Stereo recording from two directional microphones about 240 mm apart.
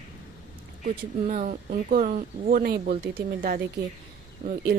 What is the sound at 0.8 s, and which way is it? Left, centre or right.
Speech, right.